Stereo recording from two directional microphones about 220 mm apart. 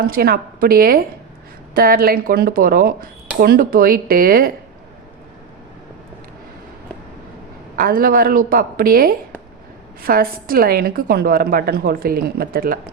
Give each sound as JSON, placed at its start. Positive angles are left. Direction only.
{"t": 0.0, "sound": "speech", "side_deg": -45}
{"t": 7.8, "sound": "a woman's voice", "side_deg": -40}